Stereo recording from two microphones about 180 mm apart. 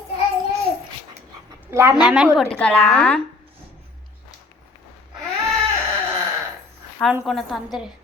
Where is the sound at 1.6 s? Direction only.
15° right (ahead or behind); by 3.2 s 5° left (ahead or behind).